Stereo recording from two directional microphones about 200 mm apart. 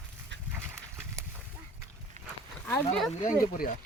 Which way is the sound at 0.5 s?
10° right (ahead or behind).